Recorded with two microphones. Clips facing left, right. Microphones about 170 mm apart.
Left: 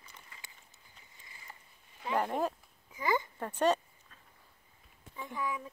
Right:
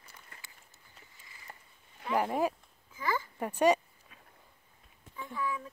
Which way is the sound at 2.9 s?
20° left (ahead or behind).